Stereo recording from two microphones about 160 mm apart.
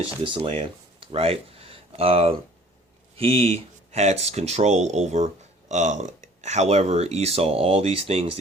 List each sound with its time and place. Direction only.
0.3 s speech: 35° right (ahead or behind)